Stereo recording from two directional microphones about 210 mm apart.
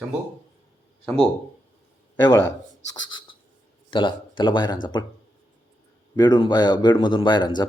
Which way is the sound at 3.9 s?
20° left (ahead or behind).